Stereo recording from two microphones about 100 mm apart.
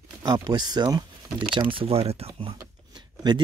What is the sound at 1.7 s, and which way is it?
Speech, 75° right (ahead or behind).